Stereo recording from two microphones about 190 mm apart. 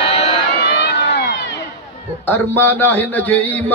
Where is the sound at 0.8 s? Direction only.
55° left (ahead or behind).